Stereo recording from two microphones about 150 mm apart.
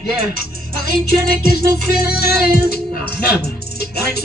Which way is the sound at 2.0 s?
90° left.